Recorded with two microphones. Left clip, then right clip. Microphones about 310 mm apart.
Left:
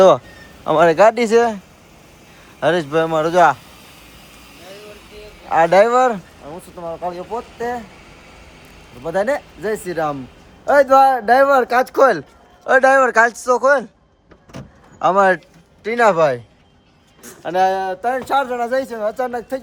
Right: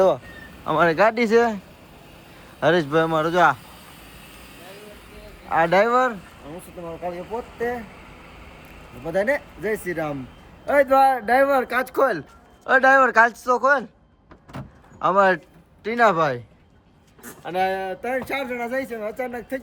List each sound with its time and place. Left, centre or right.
0.6 s speech: centre
2.6 s speech: centre
5.5 s speech: centre
9.0 s speech: centre; by 12.2 s left
12.6 s speech: centre
14.9 s a man's voice: centre
17.4 s speech: centre